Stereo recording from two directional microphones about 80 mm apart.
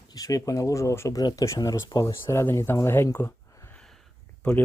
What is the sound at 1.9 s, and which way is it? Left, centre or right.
Speech, left.